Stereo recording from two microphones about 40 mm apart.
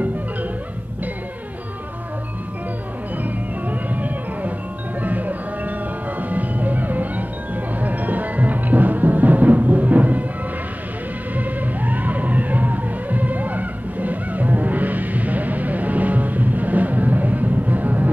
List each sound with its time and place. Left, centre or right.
3.6 s music: right
11.3 s music: right